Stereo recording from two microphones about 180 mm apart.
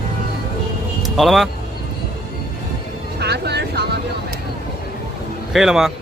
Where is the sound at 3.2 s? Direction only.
65° right (ahead or behind).